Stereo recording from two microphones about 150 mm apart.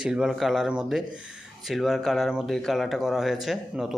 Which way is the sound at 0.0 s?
5° right (ahead or behind).